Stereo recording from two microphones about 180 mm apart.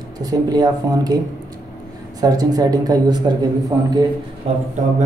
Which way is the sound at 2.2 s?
20° right (ahead or behind).